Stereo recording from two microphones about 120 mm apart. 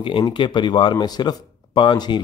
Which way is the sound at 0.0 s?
45° left (ahead or behind).